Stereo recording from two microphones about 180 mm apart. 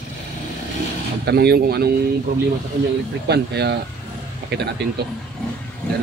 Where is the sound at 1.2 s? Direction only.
65° right (ahead or behind).